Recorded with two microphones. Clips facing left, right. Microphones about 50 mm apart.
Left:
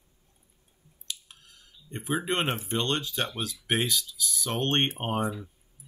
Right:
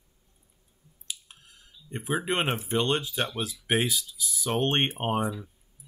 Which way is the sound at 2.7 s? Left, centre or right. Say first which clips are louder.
Right 2 dB; centre.